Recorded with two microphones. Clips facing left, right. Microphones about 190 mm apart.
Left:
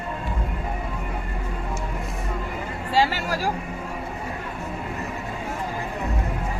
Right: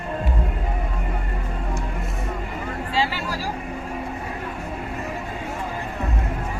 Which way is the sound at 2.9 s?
45° left (ahead or behind).